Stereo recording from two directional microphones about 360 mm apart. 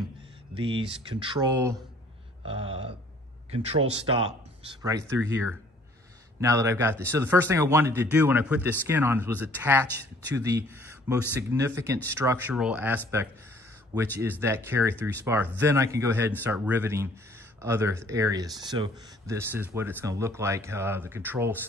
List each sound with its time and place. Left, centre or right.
0.6 s speech: centre
3.4 s speech: centre
14.4 s speech: centre